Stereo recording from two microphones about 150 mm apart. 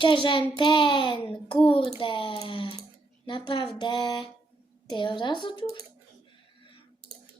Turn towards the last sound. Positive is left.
turn(degrees=30)  # may be behind; listen again after turning